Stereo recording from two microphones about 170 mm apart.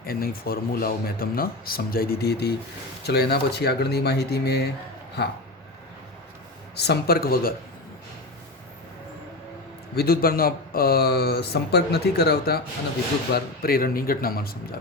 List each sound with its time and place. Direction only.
0.0 s speech: 60° left (ahead or behind)
6.7 s speech: 75° left (ahead or behind)
9.9 s speech: 65° left (ahead or behind)